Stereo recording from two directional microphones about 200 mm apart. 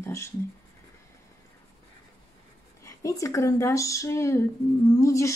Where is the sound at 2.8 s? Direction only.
15° left (ahead or behind).